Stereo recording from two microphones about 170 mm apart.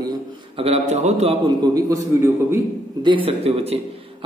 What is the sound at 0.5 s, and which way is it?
Speech, 35° right (ahead or behind).